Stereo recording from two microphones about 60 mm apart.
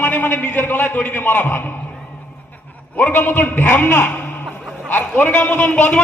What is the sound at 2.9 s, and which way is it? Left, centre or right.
A man's voice, left.